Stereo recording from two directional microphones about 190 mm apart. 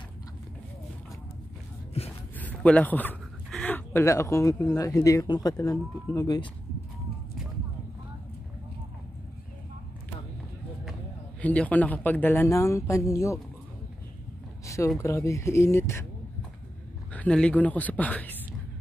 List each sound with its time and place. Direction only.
2.0 s speech: 30° left (ahead or behind)
2.3 s a sound: 10° left (ahead or behind)
4.7 s speech: 15° left (ahead or behind)
11.4 s speech: 10° left (ahead or behind)
15.0 s speech: 15° left (ahead or behind)
17.1 s speech: 5° left (ahead or behind)